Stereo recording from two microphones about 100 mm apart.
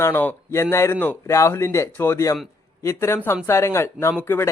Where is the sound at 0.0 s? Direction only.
20° left (ahead or behind).